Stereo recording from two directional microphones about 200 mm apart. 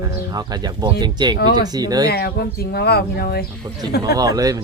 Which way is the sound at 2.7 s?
55° left (ahead or behind).